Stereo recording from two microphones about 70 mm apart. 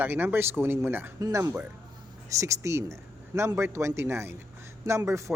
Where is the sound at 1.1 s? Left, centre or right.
Right.